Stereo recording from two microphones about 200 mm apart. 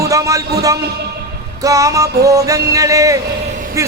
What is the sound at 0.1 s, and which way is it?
Speech, 15° right (ahead or behind).